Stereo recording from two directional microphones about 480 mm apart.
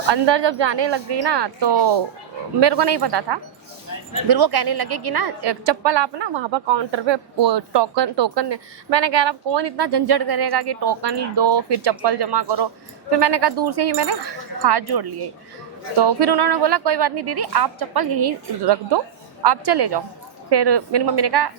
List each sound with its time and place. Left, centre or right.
0.1 s a woman's voice: right